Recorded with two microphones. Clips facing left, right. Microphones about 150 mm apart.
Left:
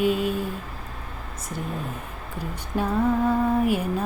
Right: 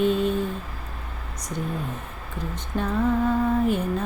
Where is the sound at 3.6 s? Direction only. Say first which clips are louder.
Even; 10° left (ahead or behind).